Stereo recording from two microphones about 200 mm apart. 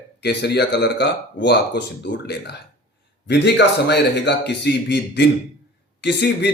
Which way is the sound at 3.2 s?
60° left (ahead or behind).